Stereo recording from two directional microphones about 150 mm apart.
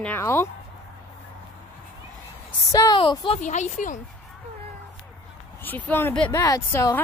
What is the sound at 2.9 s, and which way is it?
Speech, 35° left (ahead or behind).